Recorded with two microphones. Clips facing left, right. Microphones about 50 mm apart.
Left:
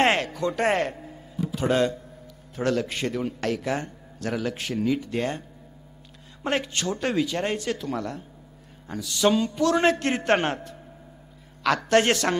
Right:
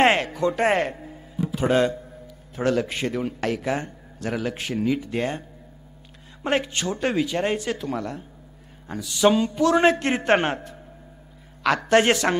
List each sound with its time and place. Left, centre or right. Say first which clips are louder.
0.0 s speech: right 3 dB; centre
6.4 s a man's voice: right 2 dB; centre